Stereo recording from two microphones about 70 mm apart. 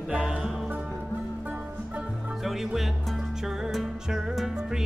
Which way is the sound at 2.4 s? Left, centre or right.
Centre.